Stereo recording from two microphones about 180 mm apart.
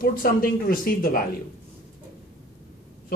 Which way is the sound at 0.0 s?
55° left (ahead or behind).